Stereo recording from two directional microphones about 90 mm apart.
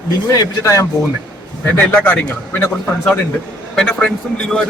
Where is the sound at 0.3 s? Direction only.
40° left (ahead or behind).